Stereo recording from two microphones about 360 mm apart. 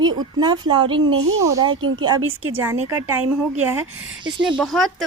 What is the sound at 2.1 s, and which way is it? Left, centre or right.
Speech, right.